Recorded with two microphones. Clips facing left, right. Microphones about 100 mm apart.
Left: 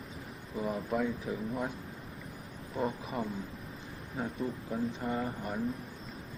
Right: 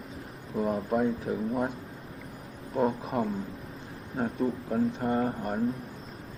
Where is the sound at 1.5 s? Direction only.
35° right (ahead or behind).